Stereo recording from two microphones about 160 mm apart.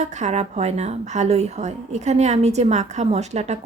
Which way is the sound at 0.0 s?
45° right (ahead or behind).